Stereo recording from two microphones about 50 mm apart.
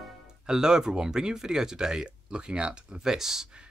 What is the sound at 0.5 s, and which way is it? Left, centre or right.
Speech, centre.